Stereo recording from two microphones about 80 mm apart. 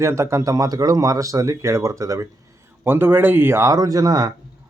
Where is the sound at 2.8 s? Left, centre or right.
Right.